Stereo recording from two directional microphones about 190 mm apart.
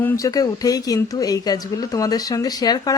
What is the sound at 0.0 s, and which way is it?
A woman's voice, 15° left (ahead or behind).